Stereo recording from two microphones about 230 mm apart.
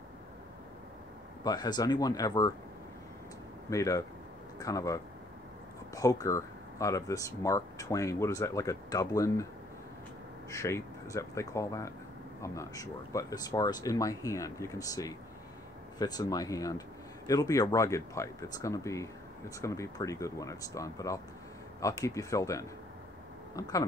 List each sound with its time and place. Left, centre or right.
1.4 s speech: centre
3.7 s speech: centre
10.5 s speech: centre